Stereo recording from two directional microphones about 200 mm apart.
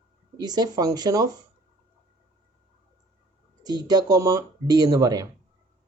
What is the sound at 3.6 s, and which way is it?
Speech, 20° right (ahead or behind).